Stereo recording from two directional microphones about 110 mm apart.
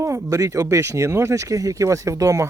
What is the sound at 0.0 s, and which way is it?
Speech, 25° right (ahead or behind).